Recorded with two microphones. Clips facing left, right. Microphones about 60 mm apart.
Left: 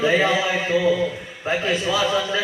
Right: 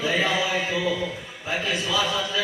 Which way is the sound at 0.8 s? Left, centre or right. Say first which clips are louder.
Left 6 dB; centre.